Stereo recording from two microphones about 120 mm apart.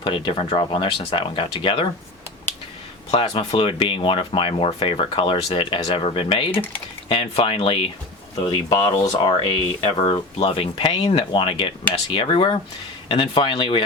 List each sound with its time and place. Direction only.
0.0 s speech: 45° left (ahead or behind)
3.1 s speech: 50° left (ahead or behind)